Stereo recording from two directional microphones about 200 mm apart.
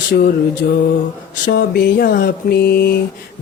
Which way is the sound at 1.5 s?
50° left (ahead or behind).